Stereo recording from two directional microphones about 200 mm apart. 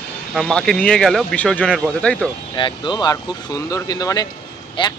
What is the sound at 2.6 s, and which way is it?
Speech, 25° left (ahead or behind).